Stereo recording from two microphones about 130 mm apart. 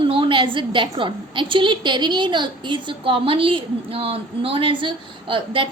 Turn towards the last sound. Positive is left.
turn(degrees=-40)  # may be behind; listen again after turning